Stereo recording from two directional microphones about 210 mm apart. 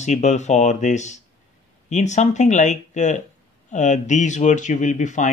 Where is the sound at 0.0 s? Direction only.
35° left (ahead or behind).